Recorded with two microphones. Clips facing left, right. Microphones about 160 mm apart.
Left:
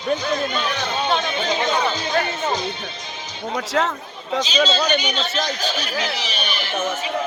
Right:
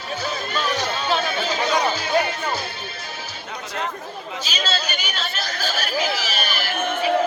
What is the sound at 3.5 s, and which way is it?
Speech, 90° left.